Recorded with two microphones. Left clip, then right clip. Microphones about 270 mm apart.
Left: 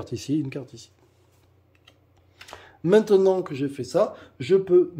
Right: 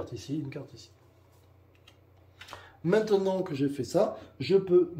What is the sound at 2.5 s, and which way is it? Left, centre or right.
Speech, left.